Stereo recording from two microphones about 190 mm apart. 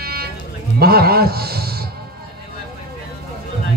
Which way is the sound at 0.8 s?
55° right (ahead or behind).